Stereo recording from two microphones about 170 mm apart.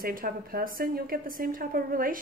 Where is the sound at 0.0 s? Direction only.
60° right (ahead or behind).